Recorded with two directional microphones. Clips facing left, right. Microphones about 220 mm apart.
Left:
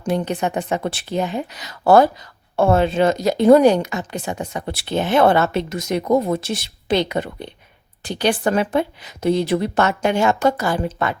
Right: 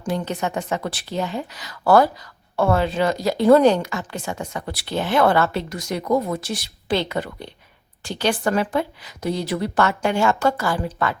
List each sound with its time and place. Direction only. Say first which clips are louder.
0.0 s speech: left 3 dB; 20° left (ahead or behind)